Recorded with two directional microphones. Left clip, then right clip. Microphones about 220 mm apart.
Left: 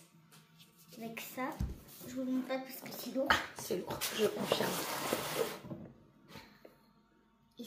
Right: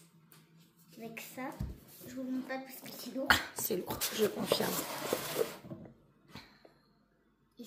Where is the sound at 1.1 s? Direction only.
5° left (ahead or behind).